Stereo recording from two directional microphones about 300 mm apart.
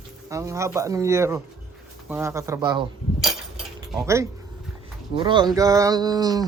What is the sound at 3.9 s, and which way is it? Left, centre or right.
Speech, centre.